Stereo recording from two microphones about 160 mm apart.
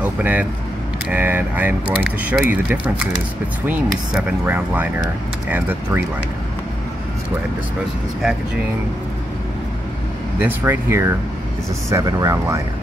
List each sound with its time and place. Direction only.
0.0 s speech: 10° right (ahead or behind)
10.4 s speech: 15° right (ahead or behind)